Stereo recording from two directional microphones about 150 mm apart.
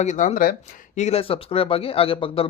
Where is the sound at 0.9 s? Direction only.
45° left (ahead or behind).